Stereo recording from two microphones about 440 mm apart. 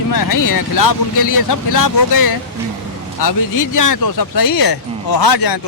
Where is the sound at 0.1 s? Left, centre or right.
Left.